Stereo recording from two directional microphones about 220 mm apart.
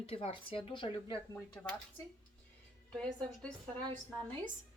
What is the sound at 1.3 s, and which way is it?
Speech, 5° left (ahead or behind).